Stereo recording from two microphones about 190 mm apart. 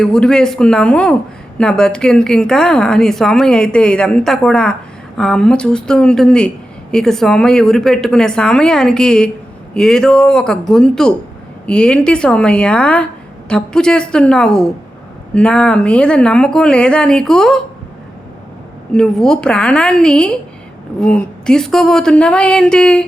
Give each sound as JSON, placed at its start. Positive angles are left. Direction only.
{"t": 0.0, "sound": "a woman's voice", "side_deg": 5}
{"t": 18.9, "sound": "a woman's voice", "side_deg": 5}